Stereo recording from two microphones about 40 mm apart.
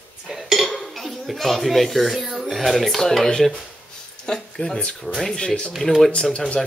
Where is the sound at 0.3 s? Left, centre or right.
Centre.